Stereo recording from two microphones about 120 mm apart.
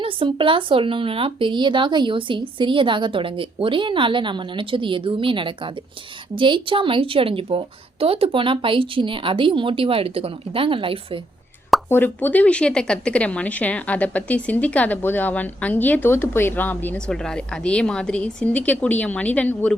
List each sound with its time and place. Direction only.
0.0 s speech: 45° right (ahead or behind)
11.9 s speech: 15° left (ahead or behind)